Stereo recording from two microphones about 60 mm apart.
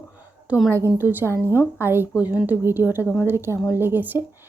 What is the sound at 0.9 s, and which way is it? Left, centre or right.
A woman's voice, right.